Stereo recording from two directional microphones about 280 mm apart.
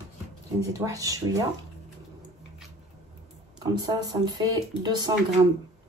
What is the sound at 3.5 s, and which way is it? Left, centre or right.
Speech, centre.